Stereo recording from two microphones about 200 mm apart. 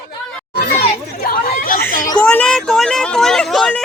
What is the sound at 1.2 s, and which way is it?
Chatter, 45° left (ahead or behind).